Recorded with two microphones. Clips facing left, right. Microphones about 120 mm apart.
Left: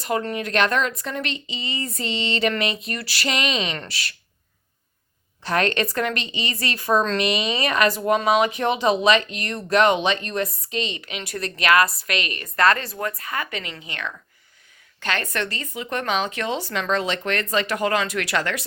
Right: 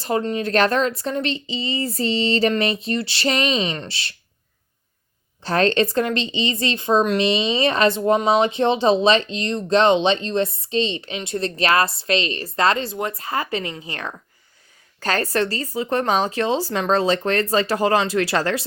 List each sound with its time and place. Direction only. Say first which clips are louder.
0.0 s speech: right 3 dB; 25° right (ahead or behind)
5.4 s speech: right 4 dB; 30° right (ahead or behind)